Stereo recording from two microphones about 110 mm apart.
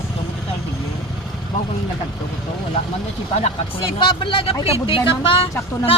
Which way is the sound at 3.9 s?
50° left (ahead or behind).